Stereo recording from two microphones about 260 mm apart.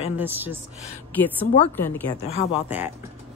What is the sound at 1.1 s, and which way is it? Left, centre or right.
Speech, centre.